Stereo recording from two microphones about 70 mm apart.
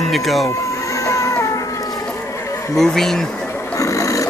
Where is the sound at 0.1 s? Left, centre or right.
Centre.